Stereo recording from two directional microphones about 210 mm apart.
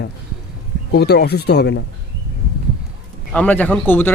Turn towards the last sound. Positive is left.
turn(degrees=10)  # may be behind; listen again after turning